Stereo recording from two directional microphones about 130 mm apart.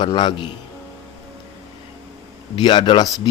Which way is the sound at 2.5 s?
35° left (ahead or behind).